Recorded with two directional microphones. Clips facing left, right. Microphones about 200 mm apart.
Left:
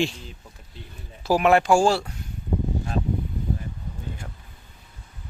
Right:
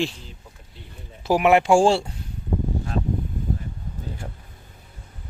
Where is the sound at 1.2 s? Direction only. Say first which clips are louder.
Right 1 dB; 15° right (ahead or behind).